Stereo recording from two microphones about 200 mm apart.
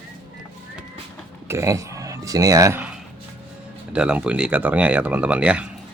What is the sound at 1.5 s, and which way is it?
Speech, 15° right (ahead or behind).